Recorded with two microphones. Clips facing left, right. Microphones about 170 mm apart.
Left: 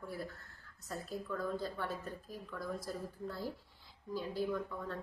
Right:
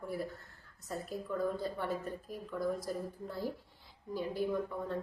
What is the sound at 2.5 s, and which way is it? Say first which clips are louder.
A woman's voice: right 6 dB; 15° right (ahead or behind).